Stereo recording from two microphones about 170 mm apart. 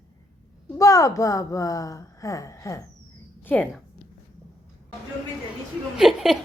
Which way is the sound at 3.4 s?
10° left (ahead or behind).